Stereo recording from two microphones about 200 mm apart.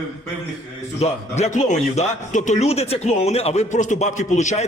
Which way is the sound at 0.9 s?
30° left (ahead or behind).